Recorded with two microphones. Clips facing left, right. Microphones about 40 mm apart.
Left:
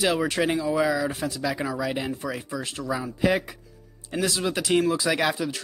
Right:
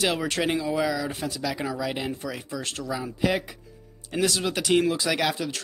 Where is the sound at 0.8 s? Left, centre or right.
Left.